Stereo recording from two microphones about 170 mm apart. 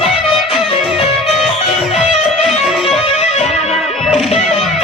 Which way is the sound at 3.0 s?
40° left (ahead or behind).